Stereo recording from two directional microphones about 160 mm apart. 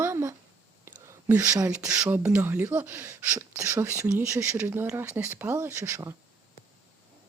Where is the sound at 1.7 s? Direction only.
5° right (ahead or behind).